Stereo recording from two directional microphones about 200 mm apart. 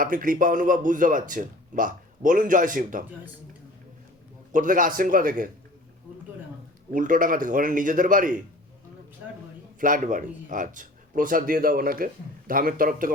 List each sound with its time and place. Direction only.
0.0 s a man's voice: 45° right (ahead or behind)
4.5 s speech: 40° right (ahead or behind)
6.9 s a man's voice: 40° right (ahead or behind)
9.8 s speech: 40° right (ahead or behind)